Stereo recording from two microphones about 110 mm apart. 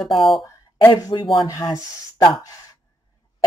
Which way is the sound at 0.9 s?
35° left (ahead or behind).